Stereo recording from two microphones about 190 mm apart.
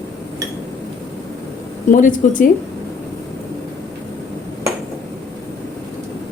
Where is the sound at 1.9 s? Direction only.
45° left (ahead or behind).